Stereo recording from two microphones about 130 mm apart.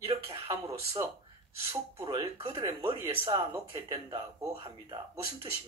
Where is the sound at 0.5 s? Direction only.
25° right (ahead or behind).